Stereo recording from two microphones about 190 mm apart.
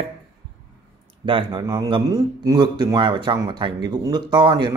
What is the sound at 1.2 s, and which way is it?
Speech, 25° right (ahead or behind).